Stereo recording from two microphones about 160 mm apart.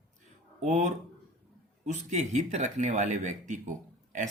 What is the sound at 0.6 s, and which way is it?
Speech, 50° right (ahead or behind).